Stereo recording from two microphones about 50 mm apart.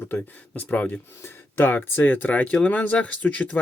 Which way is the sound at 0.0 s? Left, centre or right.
Left.